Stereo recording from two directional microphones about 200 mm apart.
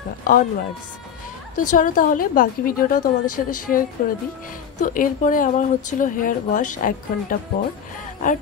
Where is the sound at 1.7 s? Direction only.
40° left (ahead or behind).